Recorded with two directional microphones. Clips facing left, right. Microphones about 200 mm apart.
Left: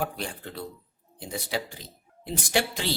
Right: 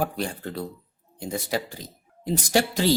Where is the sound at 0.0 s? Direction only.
40° right (ahead or behind).